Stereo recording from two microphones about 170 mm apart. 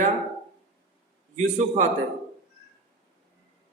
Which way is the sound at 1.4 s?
45° right (ahead or behind).